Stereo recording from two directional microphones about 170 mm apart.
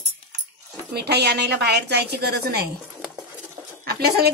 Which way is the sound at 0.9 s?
70° right (ahead or behind).